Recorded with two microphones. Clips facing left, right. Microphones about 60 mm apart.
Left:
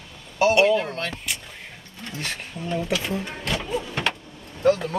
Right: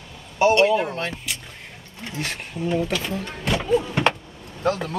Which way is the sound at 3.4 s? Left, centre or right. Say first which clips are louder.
Right 9 dB; centre.